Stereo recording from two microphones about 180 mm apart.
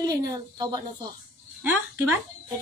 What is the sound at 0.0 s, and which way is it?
Speech, 20° right (ahead or behind).